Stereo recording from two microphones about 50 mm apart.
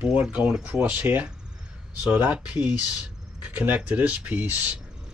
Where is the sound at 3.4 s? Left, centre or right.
Right.